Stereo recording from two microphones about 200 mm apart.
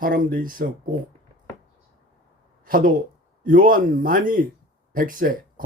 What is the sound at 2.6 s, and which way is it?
Speech, 45° right (ahead or behind).